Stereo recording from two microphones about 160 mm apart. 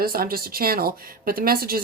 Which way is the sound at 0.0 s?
70° right (ahead or behind).